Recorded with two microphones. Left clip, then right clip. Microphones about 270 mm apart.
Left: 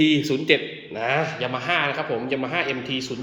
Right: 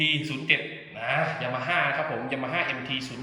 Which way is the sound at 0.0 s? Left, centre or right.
Centre.